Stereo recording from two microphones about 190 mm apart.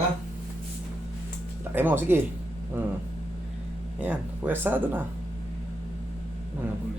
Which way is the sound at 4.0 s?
10° right (ahead or behind).